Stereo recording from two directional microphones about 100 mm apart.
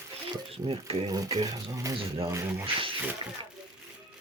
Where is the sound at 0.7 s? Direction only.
70° right (ahead or behind).